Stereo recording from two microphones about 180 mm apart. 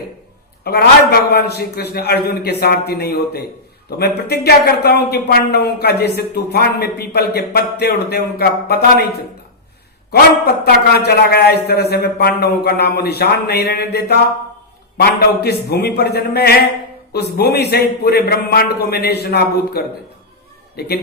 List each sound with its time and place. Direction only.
0.6 s speech: 60° left (ahead or behind)
10.1 s speech: 60° left (ahead or behind)